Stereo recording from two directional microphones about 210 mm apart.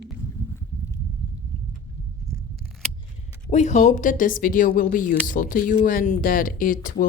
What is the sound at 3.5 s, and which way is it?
Speech, 35° left (ahead or behind).